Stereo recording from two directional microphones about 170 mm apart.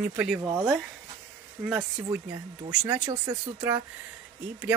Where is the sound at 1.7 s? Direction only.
20° right (ahead or behind).